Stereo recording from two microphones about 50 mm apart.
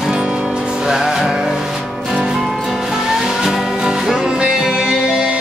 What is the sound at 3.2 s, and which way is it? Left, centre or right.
Music, centre.